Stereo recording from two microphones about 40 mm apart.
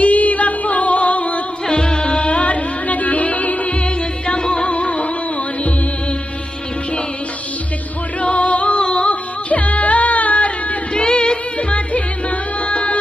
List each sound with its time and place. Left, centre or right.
0.0 s music: left
1.7 s music: left
4.3 s music: left
8.2 s music: left
9.5 s music: left
11.0 s music: left